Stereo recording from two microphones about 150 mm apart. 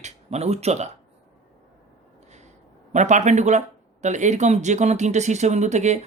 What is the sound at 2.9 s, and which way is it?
Speech, 50° right (ahead or behind).